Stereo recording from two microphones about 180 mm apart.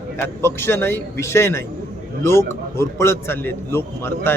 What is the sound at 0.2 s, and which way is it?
A man's voice, 15° left (ahead or behind).